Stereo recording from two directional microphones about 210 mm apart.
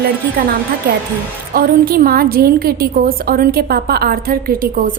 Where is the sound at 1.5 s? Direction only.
45° right (ahead or behind).